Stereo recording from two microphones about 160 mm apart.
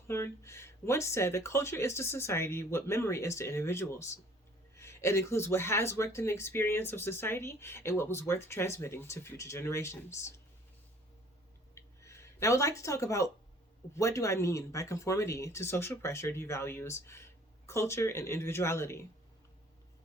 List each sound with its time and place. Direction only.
0.1 s speech: 15° left (ahead or behind)
11.7 s a sound: 20° left (ahead or behind)
13.9 s speech: 20° left (ahead or behind)